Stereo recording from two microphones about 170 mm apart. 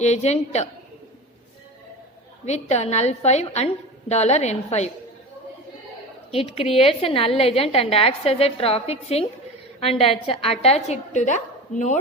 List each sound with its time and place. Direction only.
0.0 s a woman's voice: 40° left (ahead or behind)
2.4 s a woman's voice: 40° left (ahead or behind)
6.3 s a woman's voice: 35° left (ahead or behind)